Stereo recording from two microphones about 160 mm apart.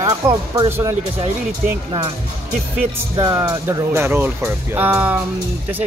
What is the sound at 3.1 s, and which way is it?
Speech, 20° right (ahead or behind).